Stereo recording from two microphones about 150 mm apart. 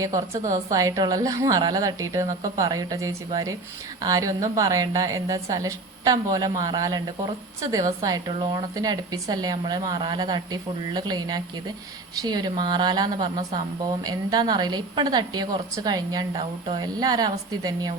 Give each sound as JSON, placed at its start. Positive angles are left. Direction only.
{"t": 0.0, "sound": "a woman's voice", "side_deg": -20}